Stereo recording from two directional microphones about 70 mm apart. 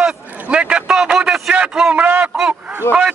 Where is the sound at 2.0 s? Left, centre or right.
Right.